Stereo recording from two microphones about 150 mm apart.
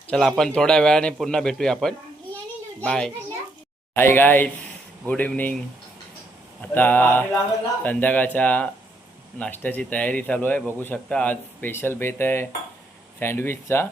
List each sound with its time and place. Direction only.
0.1 s a man's voice: 5° left (ahead or behind)
3.9 s speech: 15° left (ahead or behind)
6.6 s speech: 10° left (ahead or behind)